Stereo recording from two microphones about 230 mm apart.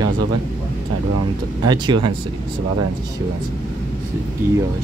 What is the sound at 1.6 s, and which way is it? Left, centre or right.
Speech, centre.